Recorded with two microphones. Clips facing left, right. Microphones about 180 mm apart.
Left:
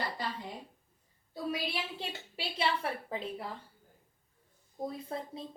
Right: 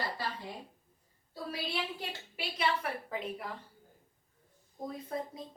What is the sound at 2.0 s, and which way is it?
A woman's voice, 30° left (ahead or behind).